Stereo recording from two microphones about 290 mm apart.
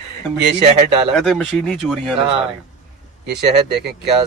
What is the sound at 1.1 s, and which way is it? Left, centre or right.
Speech, centre.